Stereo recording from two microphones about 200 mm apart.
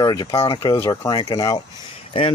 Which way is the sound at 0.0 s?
20° left (ahead or behind).